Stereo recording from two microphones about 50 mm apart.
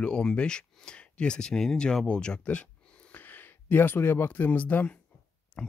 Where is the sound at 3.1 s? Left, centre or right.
Left.